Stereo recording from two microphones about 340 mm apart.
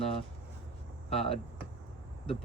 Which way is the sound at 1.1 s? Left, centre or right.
Centre.